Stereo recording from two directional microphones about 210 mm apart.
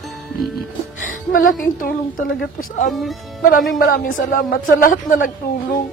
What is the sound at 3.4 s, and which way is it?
A woman's voice, 45° left (ahead or behind).